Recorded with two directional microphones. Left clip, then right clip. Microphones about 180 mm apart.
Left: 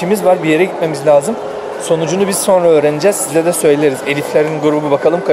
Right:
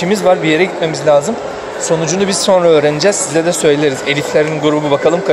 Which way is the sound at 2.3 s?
5° left (ahead or behind).